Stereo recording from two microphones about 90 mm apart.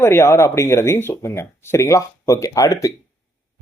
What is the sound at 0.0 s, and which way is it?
Speech, 25° left (ahead or behind).